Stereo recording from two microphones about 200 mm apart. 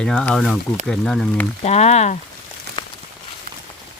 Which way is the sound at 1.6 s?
35° left (ahead or behind).